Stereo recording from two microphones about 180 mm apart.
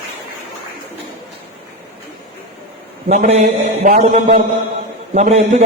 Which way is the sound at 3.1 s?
35° right (ahead or behind).